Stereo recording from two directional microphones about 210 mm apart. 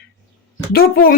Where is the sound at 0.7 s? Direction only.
45° left (ahead or behind).